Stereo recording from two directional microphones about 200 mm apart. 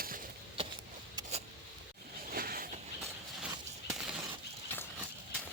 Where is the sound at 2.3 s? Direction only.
45° right (ahead or behind).